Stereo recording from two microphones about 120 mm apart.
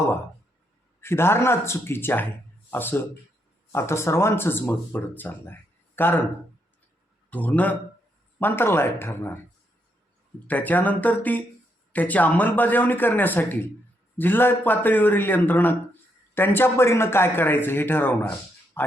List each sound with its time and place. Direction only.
1.0 s speech: 20° left (ahead or behind)
7.3 s speech: 15° left (ahead or behind)
10.4 s speech: 15° left (ahead or behind)
18.8 s a sound: 20° left (ahead or behind)